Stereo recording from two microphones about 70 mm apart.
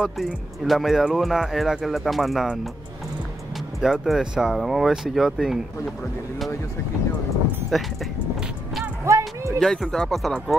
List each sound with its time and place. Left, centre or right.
0.0 s speech: centre
3.8 s speech: centre
7.7 s speech: centre
9.0 s a sound: right
9.6 s speech: centre